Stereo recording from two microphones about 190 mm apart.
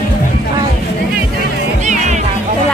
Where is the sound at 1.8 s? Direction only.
40° right (ahead or behind).